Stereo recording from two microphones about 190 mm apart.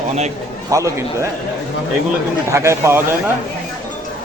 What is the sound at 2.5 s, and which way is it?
Speech, 15° right (ahead or behind).